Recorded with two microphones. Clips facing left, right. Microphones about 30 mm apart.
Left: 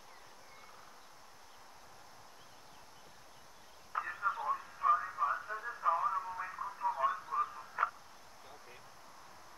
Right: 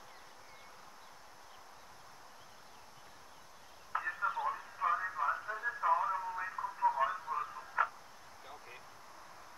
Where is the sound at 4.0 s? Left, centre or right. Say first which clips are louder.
Even; centre.